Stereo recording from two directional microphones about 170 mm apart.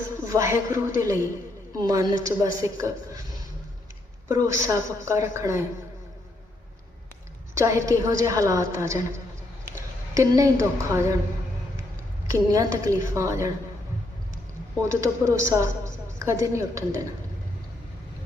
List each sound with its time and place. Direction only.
0.3 s a woman's voice: 20° right (ahead or behind)
4.3 s a woman's voice: 20° right (ahead or behind)
7.5 s a woman's voice: 20° right (ahead or behind)
10.2 s a woman's voice: 20° right (ahead or behind)
12.3 s a woman's voice: 20° right (ahead or behind)
14.8 s a woman's voice: 15° right (ahead or behind)